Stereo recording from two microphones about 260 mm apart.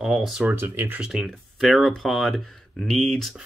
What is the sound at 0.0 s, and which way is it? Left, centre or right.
Speech, centre.